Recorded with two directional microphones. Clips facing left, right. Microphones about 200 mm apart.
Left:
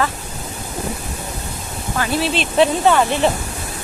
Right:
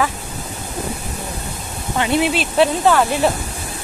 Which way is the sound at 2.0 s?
20° right (ahead or behind).